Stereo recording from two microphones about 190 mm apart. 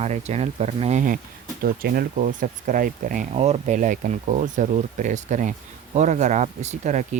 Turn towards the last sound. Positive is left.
turn(degrees=-40)  # may be behind; listen again after turning